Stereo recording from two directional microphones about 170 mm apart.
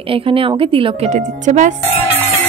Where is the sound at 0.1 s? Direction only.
30° right (ahead or behind).